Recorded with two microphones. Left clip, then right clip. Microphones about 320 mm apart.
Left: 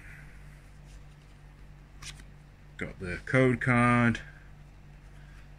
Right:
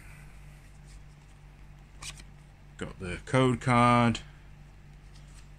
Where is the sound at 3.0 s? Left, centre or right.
Centre.